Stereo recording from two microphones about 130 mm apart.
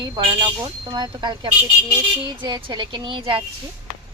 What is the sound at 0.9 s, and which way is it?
Speech, 30° right (ahead or behind).